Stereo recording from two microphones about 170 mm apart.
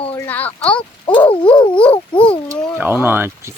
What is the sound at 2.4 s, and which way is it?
Speech, 10° right (ahead or behind).